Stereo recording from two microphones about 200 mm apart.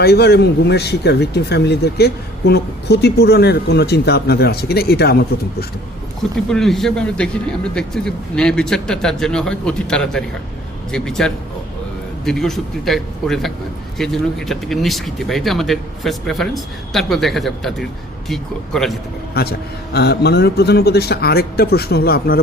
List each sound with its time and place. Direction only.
0.0 s speech: 55° left (ahead or behind)
6.5 s a man's voice: centre (ahead or behind)
19.3 s a man's voice: 50° left (ahead or behind)